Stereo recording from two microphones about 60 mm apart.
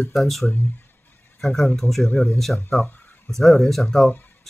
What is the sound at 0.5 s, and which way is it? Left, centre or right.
Speech, left.